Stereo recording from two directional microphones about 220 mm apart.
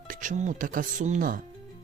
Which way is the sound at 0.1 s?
35° right (ahead or behind).